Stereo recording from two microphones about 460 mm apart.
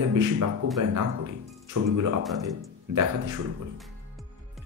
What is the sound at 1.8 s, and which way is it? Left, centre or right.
Speech, right.